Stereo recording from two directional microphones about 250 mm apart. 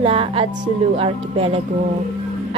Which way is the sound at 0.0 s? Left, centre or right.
Right.